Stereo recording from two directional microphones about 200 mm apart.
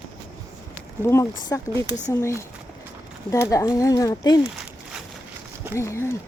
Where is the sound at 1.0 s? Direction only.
15° left (ahead or behind).